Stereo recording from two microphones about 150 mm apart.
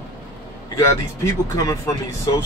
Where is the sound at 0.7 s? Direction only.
20° left (ahead or behind).